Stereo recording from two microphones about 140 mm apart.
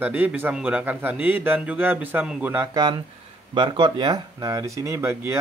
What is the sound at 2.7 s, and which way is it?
Speech, 30° right (ahead or behind).